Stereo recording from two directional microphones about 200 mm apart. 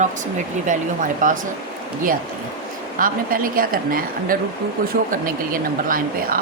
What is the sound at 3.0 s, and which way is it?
A woman's voice, 45° right (ahead or behind).